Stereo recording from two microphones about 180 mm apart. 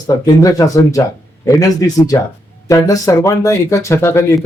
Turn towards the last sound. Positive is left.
turn(degrees=15)  # may be behind; listen again after turning